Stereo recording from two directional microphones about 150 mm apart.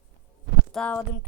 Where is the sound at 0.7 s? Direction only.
10° left (ahead or behind).